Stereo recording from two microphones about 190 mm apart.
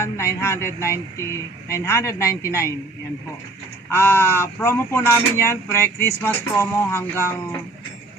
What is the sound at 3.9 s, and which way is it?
Speech, 15° left (ahead or behind).